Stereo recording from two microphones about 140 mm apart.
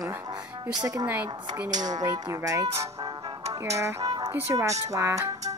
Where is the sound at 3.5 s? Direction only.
20° right (ahead or behind).